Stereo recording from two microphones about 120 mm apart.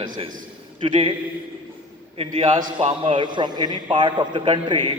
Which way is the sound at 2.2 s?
50° right (ahead or behind).